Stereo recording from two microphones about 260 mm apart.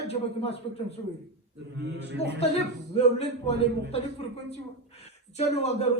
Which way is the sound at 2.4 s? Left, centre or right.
Left.